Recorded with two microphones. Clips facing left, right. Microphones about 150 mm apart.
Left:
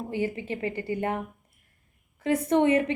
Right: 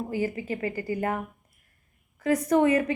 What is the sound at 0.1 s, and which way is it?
A woman's voice, 25° left (ahead or behind).